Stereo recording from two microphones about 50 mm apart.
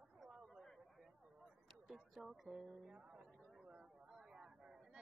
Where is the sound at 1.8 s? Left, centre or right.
Centre.